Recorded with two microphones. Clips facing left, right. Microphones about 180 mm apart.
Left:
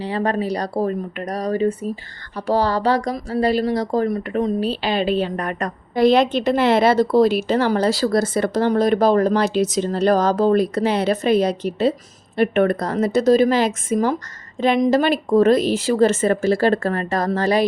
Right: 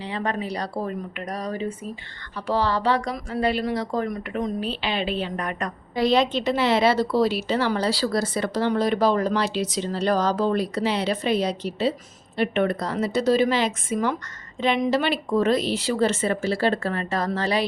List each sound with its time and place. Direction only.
0.0 s a woman's voice: 40° left (ahead or behind)